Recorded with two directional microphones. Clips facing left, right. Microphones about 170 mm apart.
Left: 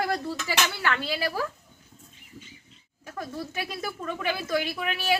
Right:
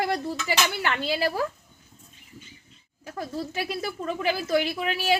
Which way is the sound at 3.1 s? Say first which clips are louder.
Right 3 dB; 30° right (ahead or behind).